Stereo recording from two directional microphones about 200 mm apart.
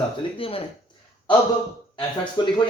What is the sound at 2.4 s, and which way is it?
Speech, 25° left (ahead or behind).